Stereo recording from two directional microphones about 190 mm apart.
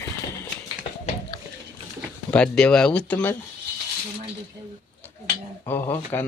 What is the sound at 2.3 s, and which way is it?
Speech, 5° left (ahead or behind).